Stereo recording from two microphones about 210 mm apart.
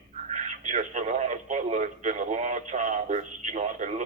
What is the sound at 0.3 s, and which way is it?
A man's voice, 35° right (ahead or behind).